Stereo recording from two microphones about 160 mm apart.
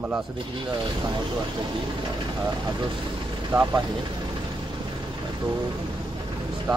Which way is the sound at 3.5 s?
10° right (ahead or behind).